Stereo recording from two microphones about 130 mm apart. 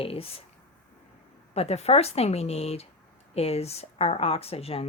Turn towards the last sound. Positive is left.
turn(degrees=50)  # may be behind; listen again after turning